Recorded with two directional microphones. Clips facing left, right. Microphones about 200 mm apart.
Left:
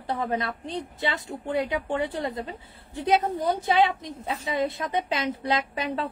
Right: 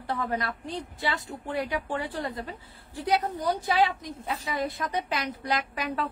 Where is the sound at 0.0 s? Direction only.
20° left (ahead or behind).